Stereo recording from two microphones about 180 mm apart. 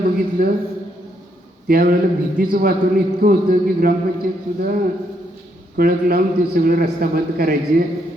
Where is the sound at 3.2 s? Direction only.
55° right (ahead or behind).